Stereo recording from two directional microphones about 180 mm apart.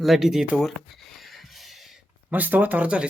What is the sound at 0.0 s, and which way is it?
Speech, centre (ahead or behind).